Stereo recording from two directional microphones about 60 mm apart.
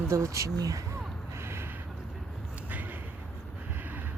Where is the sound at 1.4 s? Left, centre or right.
Right.